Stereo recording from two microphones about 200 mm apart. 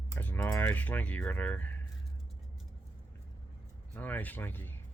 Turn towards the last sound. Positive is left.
turn(degrees=10)  # may be behind; listen again after turning